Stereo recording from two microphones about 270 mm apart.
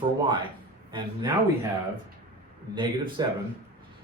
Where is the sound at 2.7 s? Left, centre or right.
Centre.